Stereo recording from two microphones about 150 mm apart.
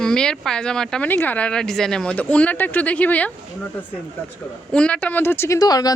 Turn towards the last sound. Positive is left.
turn(degrees=25)  # may be behind; listen again after turning